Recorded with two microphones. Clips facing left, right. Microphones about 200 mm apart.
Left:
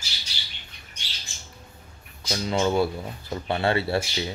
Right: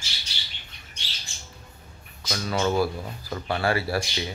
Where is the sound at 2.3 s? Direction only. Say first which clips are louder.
Left 1 dB; 20° left (ahead or behind).